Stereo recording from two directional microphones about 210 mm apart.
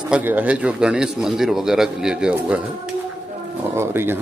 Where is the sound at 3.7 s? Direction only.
10° right (ahead or behind).